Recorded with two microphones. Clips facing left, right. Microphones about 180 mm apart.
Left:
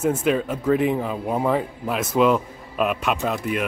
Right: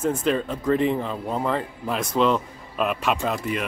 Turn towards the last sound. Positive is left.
turn(degrees=0)  # may be behind; listen again after turning